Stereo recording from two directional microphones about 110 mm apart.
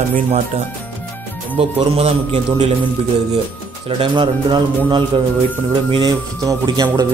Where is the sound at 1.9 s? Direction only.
65° right (ahead or behind).